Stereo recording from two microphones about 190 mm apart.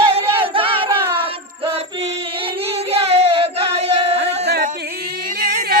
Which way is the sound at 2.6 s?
35° right (ahead or behind).